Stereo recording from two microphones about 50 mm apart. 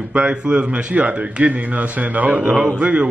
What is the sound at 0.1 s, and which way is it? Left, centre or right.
A man's voice, right.